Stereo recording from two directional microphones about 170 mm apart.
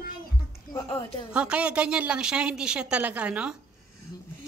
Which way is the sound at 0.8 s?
35° left (ahead or behind).